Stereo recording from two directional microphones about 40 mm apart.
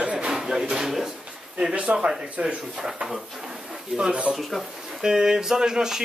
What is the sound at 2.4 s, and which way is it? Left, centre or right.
Speech, right.